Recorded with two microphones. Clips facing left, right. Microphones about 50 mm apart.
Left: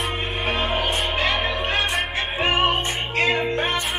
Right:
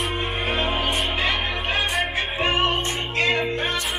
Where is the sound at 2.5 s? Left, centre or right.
Centre.